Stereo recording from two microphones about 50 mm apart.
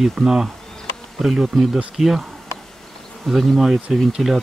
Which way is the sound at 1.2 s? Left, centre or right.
Centre.